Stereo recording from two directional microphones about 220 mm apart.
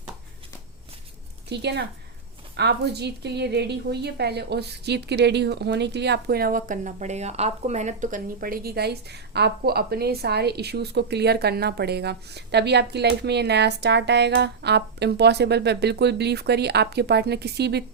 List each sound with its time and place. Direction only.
1.5 s a woman's voice: 50° right (ahead or behind)